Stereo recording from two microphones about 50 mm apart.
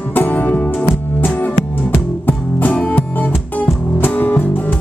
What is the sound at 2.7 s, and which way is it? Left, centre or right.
Music, left.